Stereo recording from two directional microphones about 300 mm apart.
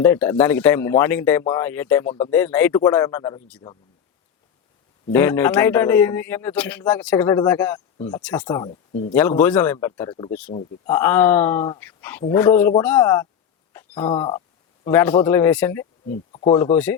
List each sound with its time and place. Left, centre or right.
0.0 s a man's voice: centre
5.1 s a man's voice: centre
7.9 s speech: centre
8.2 s a man's voice: centre
8.4 s a man's voice: centre
13.7 s a sound: centre
14.1 s a man's voice: centre
14.8 s a man's voice: centre
16.0 s speech: left
16.7 s a man's voice: centre